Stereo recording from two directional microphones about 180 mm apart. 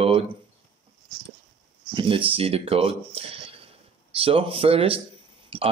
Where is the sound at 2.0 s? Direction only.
30° right (ahead or behind).